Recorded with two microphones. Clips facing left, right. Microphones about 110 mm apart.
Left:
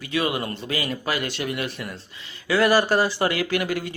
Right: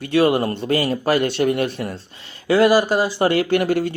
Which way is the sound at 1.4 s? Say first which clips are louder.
Right 9 dB; 40° right (ahead or behind).